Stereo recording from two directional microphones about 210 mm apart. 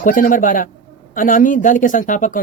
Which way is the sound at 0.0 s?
40° left (ahead or behind).